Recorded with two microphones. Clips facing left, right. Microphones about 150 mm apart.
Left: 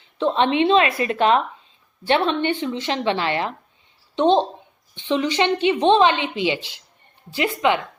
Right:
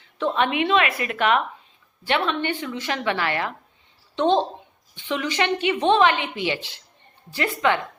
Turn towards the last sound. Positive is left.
turn(degrees=20)  # may be behind; listen again after turning